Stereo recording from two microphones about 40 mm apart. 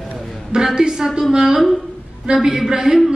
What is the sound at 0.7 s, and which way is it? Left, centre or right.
Speech, centre.